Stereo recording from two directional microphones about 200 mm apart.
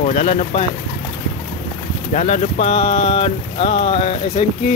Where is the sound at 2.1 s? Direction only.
35° left (ahead or behind).